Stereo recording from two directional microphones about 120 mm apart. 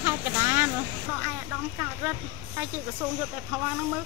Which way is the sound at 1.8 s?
15° right (ahead or behind).